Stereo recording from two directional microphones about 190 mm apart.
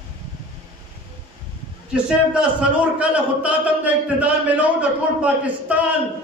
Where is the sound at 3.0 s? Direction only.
5° right (ahead or behind).